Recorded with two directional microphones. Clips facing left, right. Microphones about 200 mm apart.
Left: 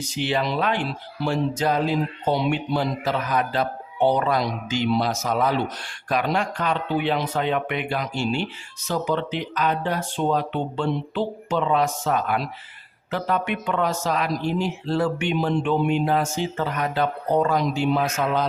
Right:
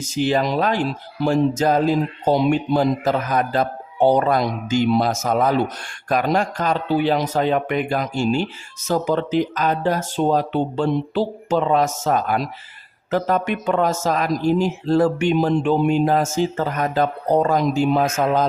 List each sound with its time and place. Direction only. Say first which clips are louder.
0.0 s speech: right 5 dB; 45° right (ahead or behind)